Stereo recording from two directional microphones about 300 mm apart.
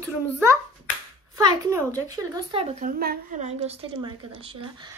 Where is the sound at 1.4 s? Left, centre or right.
Centre.